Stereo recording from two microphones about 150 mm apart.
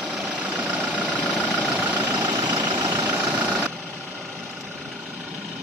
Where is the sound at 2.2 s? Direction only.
25° right (ahead or behind).